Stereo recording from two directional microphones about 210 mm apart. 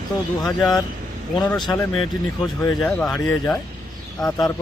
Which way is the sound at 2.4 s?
10° left (ahead or behind).